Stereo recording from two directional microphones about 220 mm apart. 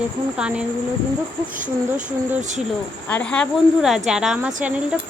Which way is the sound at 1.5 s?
35° right (ahead or behind).